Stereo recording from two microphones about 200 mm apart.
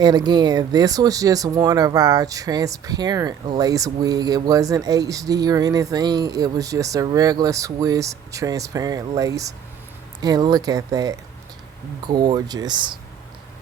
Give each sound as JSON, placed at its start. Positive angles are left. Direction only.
{"t": 0.0, "sound": "speech", "side_deg": -20}